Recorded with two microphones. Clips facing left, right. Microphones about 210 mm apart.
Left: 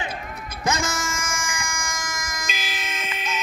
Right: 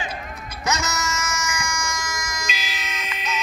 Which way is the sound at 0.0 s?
50° left (ahead or behind).